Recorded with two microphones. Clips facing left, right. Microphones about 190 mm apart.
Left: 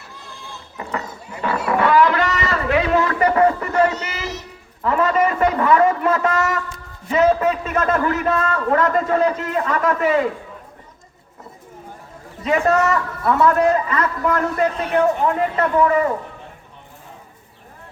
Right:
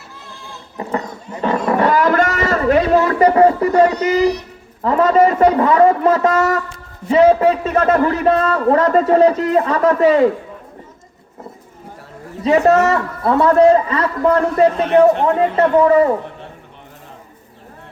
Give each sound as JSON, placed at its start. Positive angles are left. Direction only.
{"t": 0.8, "sound": "a sound", "side_deg": -35}
{"t": 3.9, "sound": "speech", "side_deg": -15}
{"t": 4.8, "sound": "a man's voice", "side_deg": -35}
{"t": 12.5, "sound": "a man's voice", "side_deg": -35}